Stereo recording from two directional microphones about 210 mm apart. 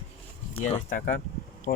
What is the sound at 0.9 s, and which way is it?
Speech, 40° left (ahead or behind).